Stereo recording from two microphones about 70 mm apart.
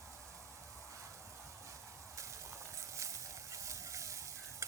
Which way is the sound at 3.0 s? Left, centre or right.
Right.